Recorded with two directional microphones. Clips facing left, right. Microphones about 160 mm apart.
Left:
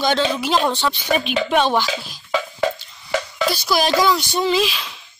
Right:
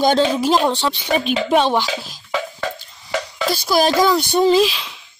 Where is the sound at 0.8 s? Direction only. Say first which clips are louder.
Right 1 dB; 25° right (ahead or behind).